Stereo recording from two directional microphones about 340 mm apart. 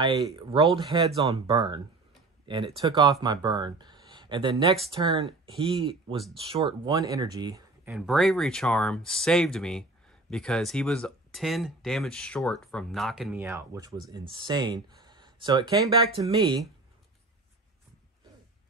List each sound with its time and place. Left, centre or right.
0.3 s speech: centre